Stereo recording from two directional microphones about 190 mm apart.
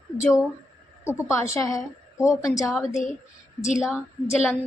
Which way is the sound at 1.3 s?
15° left (ahead or behind).